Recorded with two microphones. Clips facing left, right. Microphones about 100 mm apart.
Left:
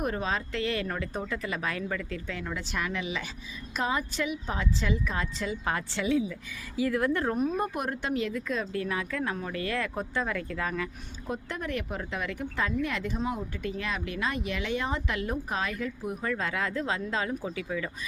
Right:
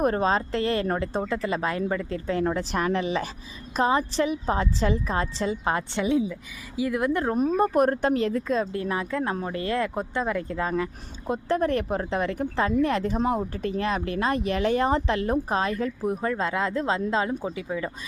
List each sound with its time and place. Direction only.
0.0 s a woman's voice: 40° right (ahead or behind)
13.1 s a woman's voice: 50° right (ahead or behind); by 17.9 s 25° right (ahead or behind)